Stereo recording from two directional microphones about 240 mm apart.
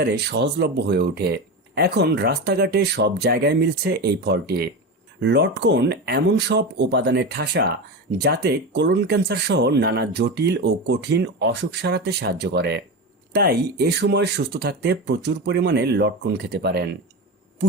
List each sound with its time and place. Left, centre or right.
0.0 s speech: right